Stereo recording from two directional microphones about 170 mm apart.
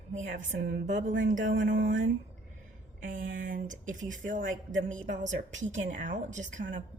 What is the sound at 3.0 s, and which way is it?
Speech, 50° right (ahead or behind).